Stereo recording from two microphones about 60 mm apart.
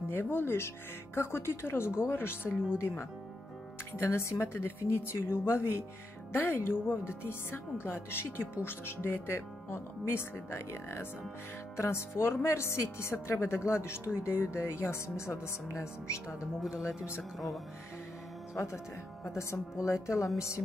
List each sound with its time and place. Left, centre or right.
0.1 s speech: left
3.9 s speech: left
16.6 s speech: centre
17.2 s speech: centre
18.5 s a woman's voice: left